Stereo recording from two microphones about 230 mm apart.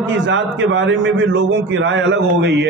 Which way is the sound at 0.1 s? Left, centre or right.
Right.